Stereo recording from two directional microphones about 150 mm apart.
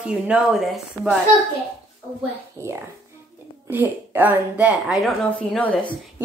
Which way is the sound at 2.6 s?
20° right (ahead or behind).